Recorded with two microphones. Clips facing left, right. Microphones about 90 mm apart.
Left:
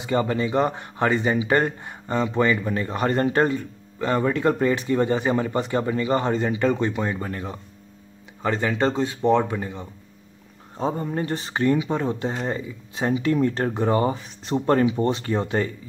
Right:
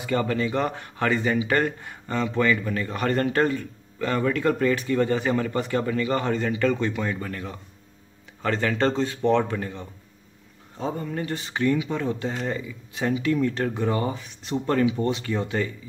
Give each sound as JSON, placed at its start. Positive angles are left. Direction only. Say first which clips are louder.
{"t": 0.0, "sound": "speech", "louder": "left 2 dB", "side_deg": 20}
{"t": 8.4, "sound": "speech", "louder": "left 1 dB", "side_deg": 15}
{"t": 10.8, "sound": "speech", "louder": "left 3 dB", "side_deg": 30}